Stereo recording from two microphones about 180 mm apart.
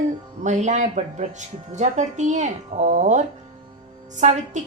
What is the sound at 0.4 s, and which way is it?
A woman's voice, 40° right (ahead or behind).